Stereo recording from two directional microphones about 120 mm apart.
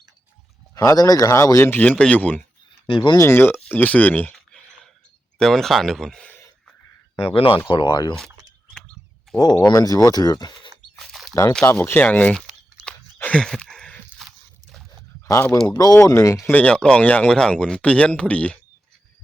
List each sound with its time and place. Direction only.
0.8 s speech: 30° left (ahead or behind); by 2.4 s 15° left (ahead or behind)
2.8 s speech: 45° left (ahead or behind)
3.2 s speech: 20° left (ahead or behind)
5.4 s speech: 5° left (ahead or behind)
7.2 s speech: 50° left (ahead or behind)
7.7 s speech: 40° left (ahead or behind)
9.3 s a sound: 5° left (ahead or behind)
9.7 s speech: 30° left (ahead or behind)
10.9 s a sound: centre (ahead or behind)
11.6 s speech: 20° left (ahead or behind)
13.1 s a sound: 10° left (ahead or behind)
15.8 s speech: 30° left (ahead or behind)
16.5 s speech: 10° left (ahead or behind)